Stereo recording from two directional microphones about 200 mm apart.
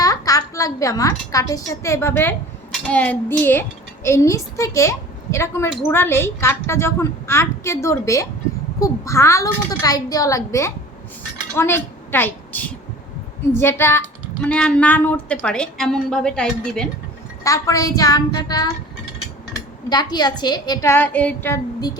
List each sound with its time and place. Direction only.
0.0 s a woman's voice: 20° left (ahead or behind)
17.4 s a woman's voice: 15° left (ahead or behind)